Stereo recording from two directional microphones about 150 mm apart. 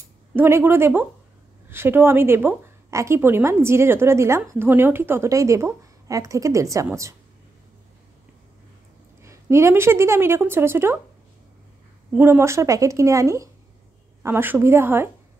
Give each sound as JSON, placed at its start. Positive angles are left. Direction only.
{"t": 0.4, "sound": "a woman's voice", "side_deg": -15}
{"t": 9.2, "sound": "a woman's voice", "side_deg": -20}
{"t": 12.2, "sound": "a woman's voice", "side_deg": -15}